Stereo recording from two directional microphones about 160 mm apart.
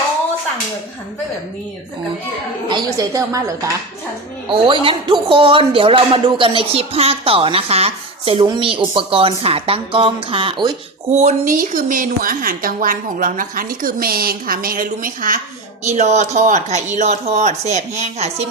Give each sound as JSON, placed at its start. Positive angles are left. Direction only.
{"t": 2.6, "sound": "speech", "side_deg": -25}
{"t": 4.4, "sound": "speech", "side_deg": -30}
{"t": 11.1, "sound": "a woman's voice", "side_deg": -45}
{"t": 15.9, "sound": "speech", "side_deg": -45}